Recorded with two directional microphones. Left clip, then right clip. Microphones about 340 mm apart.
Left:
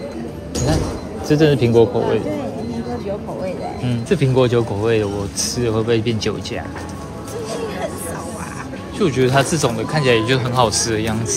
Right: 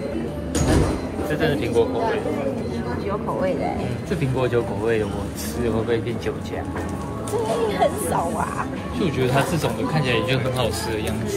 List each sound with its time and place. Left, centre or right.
1.3 s speech: left
4.1 s speech: left
9.0 s speech: left